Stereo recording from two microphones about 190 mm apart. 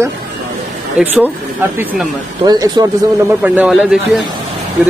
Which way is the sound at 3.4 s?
5° right (ahead or behind).